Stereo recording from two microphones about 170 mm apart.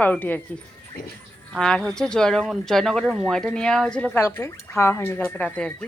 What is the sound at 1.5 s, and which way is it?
Speech, 5° left (ahead or behind).